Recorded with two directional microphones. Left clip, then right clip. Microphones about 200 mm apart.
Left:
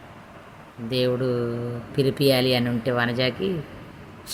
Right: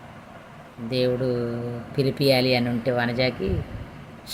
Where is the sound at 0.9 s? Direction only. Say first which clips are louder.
Even; 20° left (ahead or behind).